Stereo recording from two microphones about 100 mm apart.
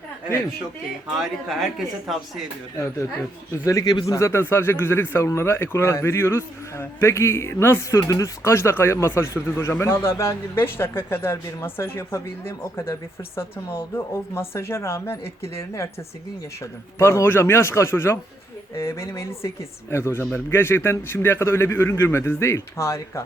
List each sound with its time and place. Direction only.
1.0 s speech: centre (ahead or behind)
3.7 s speech: 35° left (ahead or behind)
17.0 s speech: 30° left (ahead or behind)